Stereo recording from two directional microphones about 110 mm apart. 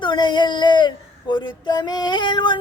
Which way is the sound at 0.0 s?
45° left (ahead or behind).